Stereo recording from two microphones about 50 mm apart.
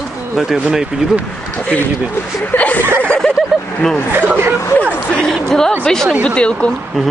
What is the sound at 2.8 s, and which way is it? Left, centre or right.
Speech, right.